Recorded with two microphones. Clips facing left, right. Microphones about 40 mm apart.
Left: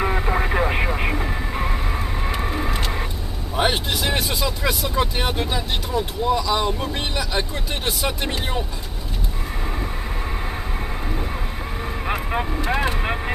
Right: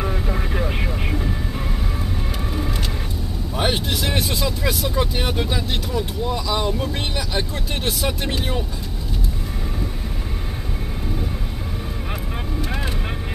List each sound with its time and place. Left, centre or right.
0.0 s vehicle: left
3.5 s speech: centre
12.4 s speech: left